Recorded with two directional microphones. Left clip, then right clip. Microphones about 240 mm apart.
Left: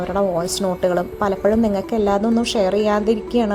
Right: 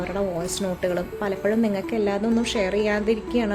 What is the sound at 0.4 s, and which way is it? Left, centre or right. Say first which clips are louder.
Speech: left 6 dB; centre.